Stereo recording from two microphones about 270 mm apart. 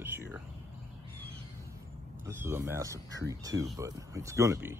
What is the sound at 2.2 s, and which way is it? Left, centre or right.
Speech, centre.